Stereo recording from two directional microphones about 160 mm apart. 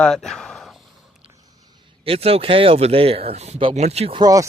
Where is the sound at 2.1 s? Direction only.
35° right (ahead or behind).